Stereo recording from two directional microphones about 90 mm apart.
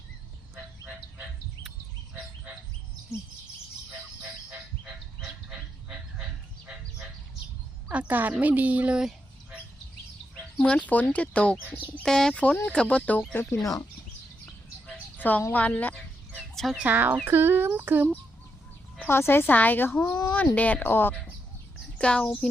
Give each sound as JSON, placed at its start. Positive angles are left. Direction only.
{"t": 5.5, "sound": "a sound", "side_deg": -10}
{"t": 7.9, "sound": "a woman's voice", "side_deg": -20}
{"t": 10.6, "sound": "speech", "side_deg": 10}
{"t": 14.8, "sound": "a sound", "side_deg": 20}
{"t": 15.5, "sound": "speech", "side_deg": 15}
{"t": 16.7, "sound": "a sound", "side_deg": -20}
{"t": 18.9, "sound": "speech", "side_deg": 25}
{"t": 20.6, "sound": "speech", "side_deg": 15}
{"t": 21.9, "sound": "a child's voice", "side_deg": 10}